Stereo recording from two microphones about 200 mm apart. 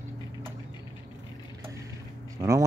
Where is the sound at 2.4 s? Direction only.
15° right (ahead or behind).